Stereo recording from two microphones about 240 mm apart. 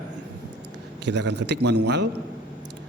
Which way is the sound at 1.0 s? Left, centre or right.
Right.